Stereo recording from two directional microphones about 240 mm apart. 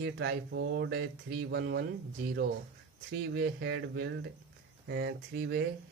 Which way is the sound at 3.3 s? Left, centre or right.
Right.